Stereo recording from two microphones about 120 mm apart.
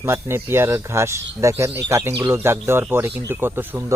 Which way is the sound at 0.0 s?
20° right (ahead or behind).